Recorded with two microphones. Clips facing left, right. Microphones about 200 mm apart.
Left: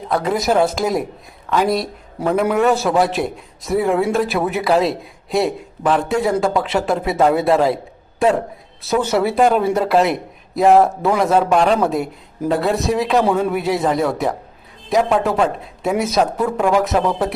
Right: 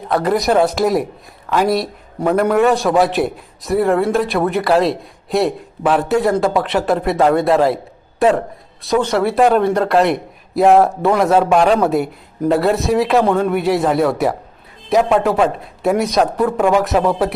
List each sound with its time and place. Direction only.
0.1 s a man's voice: centre (ahead or behind)